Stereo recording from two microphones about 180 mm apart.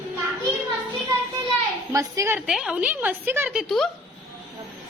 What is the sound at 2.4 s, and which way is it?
A woman's voice, 5° right (ahead or behind).